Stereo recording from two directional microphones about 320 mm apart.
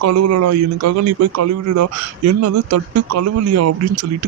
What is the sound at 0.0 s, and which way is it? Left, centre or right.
Speech, right.